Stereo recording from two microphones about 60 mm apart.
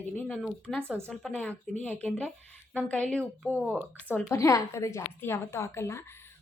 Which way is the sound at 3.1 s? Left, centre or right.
Centre.